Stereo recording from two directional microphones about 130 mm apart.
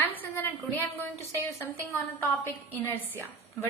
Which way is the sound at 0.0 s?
15° left (ahead or behind).